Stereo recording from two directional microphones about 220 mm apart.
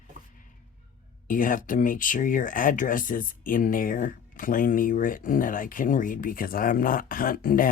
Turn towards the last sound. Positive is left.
turn(degrees=40)  # may be behind; listen again after turning